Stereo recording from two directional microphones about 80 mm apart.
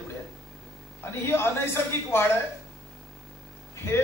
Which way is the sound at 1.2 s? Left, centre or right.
Left.